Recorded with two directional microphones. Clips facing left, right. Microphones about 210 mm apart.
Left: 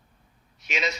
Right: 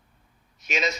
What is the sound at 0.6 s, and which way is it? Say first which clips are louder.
Speech: right 2 dB; 45° right (ahead or behind).